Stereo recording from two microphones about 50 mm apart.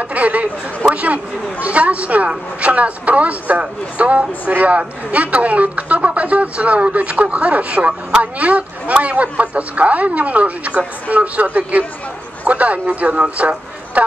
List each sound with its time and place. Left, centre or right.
0.0 s a man's voice: right